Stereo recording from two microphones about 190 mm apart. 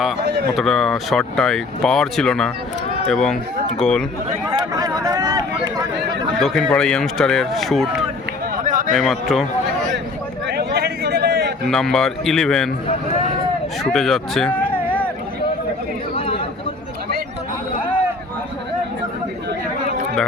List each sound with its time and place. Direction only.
0.5 s speech: centre (ahead or behind)
4.5 s a sound: 20° right (ahead or behind)
6.4 s speech: centre (ahead or behind)
8.5 s run: 45° right (ahead or behind)
9.0 s speech: centre (ahead or behind)
10.4 s a sound: 60° right (ahead or behind)
11.6 s speech: centre (ahead or behind)
13.9 s speech: centre (ahead or behind)
14.6 s a sound: 10° left (ahead or behind)
16.1 s chatter: 30° left (ahead or behind)